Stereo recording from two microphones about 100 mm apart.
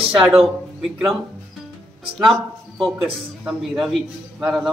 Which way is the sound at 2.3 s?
Centre (ahead or behind).